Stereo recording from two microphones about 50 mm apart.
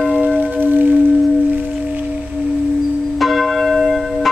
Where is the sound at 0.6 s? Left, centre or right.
Right.